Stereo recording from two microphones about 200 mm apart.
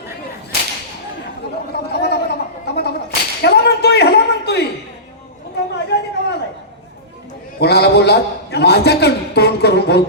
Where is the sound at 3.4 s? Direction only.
55° left (ahead or behind).